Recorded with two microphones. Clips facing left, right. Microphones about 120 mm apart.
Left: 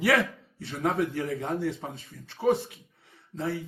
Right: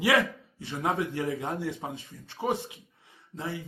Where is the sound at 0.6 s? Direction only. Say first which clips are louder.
Left 2 dB; 15° right (ahead or behind).